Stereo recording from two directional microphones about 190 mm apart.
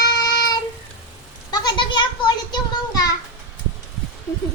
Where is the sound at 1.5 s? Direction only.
20° left (ahead or behind).